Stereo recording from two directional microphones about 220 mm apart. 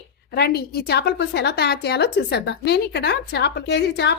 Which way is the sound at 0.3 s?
45° left (ahead or behind).